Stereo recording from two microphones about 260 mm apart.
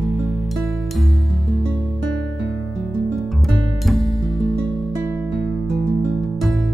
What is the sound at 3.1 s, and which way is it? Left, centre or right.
Music, centre.